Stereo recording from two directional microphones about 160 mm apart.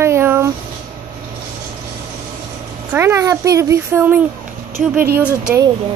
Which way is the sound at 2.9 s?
15° right (ahead or behind).